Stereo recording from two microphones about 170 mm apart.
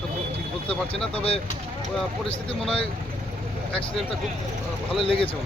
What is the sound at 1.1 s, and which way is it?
Speech, 35° left (ahead or behind).